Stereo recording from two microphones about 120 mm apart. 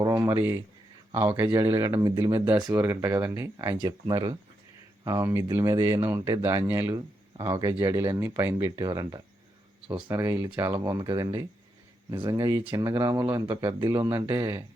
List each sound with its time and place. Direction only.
0.0 s speech: 25° right (ahead or behind)
3.0 s speech: 15° right (ahead or behind)
7.3 s speech: 35° right (ahead or behind)
8.7 s speech: 30° right (ahead or behind)
10.1 s speech: 20° right (ahead or behind)
10.8 s speech: 30° right (ahead or behind)
14.2 s speech: 20° right (ahead or behind)